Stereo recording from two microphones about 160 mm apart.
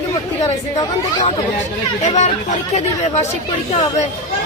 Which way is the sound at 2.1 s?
45° left (ahead or behind).